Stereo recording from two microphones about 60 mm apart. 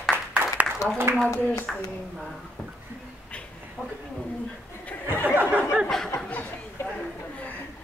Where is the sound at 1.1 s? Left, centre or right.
Right.